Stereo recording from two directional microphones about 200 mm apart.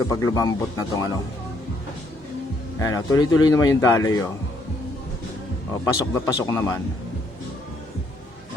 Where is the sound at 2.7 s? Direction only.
15° left (ahead or behind).